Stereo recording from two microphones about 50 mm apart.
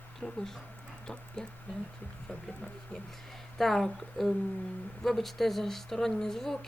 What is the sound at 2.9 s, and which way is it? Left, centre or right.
Speech, left.